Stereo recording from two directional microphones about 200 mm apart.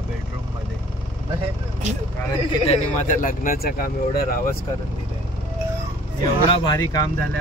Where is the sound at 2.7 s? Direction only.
40° left (ahead or behind).